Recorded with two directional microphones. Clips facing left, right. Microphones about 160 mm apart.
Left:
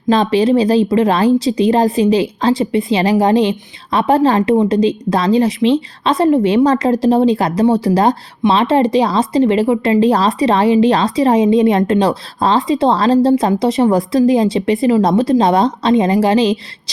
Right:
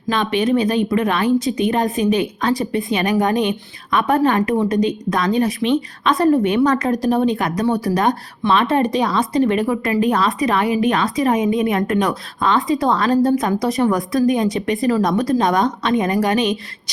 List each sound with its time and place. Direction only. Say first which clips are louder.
0.1 s a woman's voice: left 6 dB; 35° left (ahead or behind)